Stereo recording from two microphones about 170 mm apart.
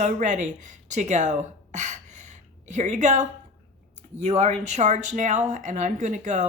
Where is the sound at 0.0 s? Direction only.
50° right (ahead or behind).